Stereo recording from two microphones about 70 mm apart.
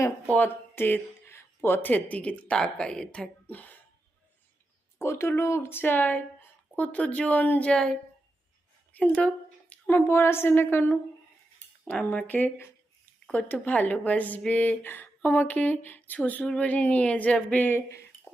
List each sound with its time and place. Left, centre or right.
0.3 s speech: left; by 3.2 s centre
4.9 s speech: left
7.7 s speech: centre
8.9 s a sound: left
9.9 s a woman's voice: left
11.9 s speech: centre
17.7 s a woman's voice: left